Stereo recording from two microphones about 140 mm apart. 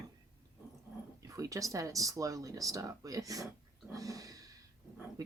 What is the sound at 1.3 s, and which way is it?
Speech, 25° right (ahead or behind).